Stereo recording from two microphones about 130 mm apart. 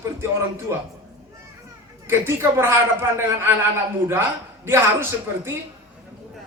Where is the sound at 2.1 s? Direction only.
20° right (ahead or behind).